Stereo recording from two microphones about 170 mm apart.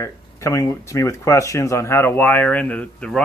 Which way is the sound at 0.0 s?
15° left (ahead or behind).